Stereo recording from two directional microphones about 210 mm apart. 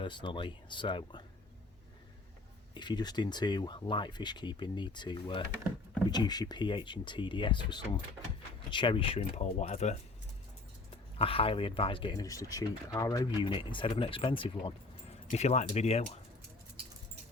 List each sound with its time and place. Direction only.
0.0 s speech: 20° left (ahead or behind)
2.7 s speech: 20° left (ahead or behind)
11.2 s speech: 25° left (ahead or behind)